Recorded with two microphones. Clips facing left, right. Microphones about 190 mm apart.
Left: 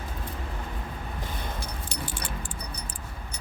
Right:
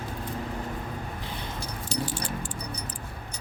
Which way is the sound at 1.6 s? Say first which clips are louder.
Right 4 dB; 55° left (ahead or behind).